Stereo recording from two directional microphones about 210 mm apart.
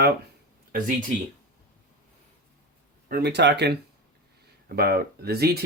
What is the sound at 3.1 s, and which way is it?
Speech, 50° right (ahead or behind).